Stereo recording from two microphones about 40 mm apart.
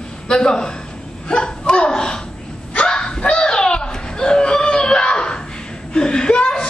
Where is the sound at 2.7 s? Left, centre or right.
Left.